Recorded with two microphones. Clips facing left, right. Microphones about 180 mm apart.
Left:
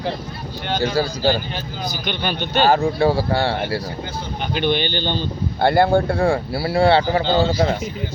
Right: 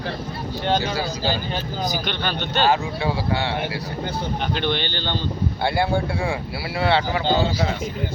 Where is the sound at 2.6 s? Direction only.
40° left (ahead or behind).